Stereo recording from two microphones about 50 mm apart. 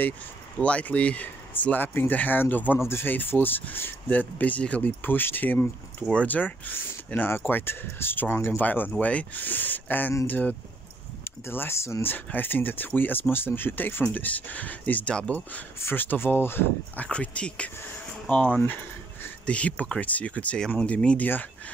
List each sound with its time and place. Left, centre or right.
0.6 s speech: left
2.8 s speech: left
3.1 s speech: left
4.1 s speech: left
5.0 s speech: left
8.5 s speech: left
11.4 s speech: left
11.7 s speech: left
12.3 s speech: left
14.0 s speech: left
15.8 s speech: left
16.9 s speech: left
21.2 s speech: left